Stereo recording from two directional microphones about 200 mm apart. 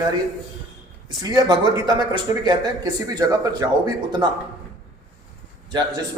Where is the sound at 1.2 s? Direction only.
20° right (ahead or behind).